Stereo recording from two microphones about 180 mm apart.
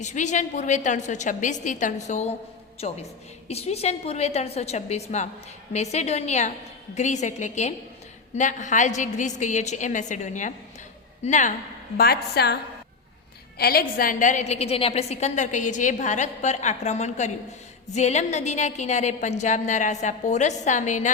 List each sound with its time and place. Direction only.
0.0 s a woman's voice: 40° left (ahead or behind)
11.9 s a woman's voice: 60° left (ahead or behind)
13.6 s a woman's voice: 60° left (ahead or behind); by 21.1 s 45° left (ahead or behind)